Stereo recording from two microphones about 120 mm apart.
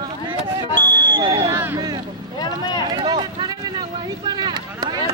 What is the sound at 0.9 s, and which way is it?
Smoke detector, 40° right (ahead or behind).